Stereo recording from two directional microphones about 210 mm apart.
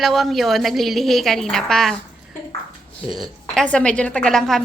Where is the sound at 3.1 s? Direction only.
Centre (ahead or behind).